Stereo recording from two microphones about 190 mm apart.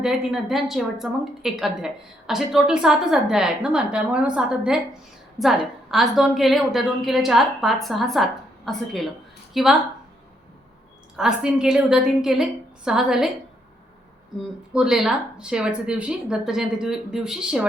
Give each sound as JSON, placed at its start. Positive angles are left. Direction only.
{"t": 0.0, "sound": "a woman's voice", "side_deg": 0}
{"t": 11.2, "sound": "a woman's voice", "side_deg": -5}
{"t": 14.7, "sound": "a woman's voice", "side_deg": -5}